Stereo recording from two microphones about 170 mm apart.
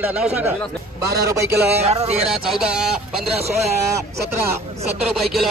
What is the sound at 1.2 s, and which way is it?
Speech, 20° right (ahead or behind).